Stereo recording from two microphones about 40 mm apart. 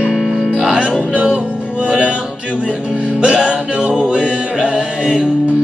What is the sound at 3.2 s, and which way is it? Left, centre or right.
Music, right.